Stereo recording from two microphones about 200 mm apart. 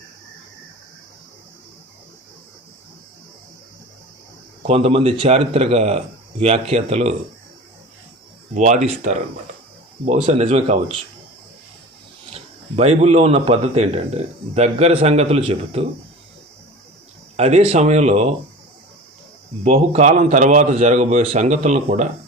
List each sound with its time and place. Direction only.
4.6 s speech: 30° right (ahead or behind)
8.5 s speech: 35° right (ahead or behind)
12.3 s speech: 35° right (ahead or behind)
17.3 s speech: 30° right (ahead or behind)
19.6 s speech: 35° right (ahead or behind)